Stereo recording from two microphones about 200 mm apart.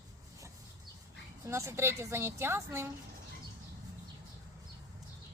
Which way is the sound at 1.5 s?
15° right (ahead or behind).